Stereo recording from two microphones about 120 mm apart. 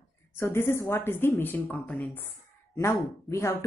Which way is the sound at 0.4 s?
20° left (ahead or behind).